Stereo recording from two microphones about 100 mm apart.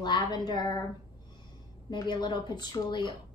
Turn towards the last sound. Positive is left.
turn(degrees=50)  # may be behind; listen again after turning